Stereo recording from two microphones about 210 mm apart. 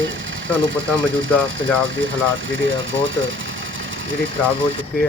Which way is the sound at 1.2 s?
65° right (ahead or behind).